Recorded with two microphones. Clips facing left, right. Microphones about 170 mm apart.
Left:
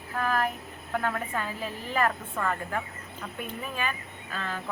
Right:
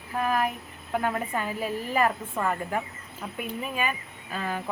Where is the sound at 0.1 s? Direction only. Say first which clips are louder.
Right 2 dB; 15° right (ahead or behind).